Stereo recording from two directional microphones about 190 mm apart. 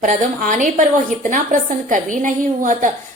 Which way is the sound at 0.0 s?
40° right (ahead or behind).